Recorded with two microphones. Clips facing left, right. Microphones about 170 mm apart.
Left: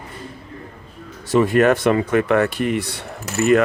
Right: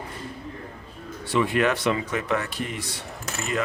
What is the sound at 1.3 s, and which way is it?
Speech, 45° left (ahead or behind).